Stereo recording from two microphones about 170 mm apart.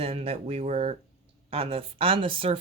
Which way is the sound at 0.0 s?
35° right (ahead or behind).